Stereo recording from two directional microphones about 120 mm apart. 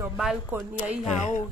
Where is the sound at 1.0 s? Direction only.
90° left.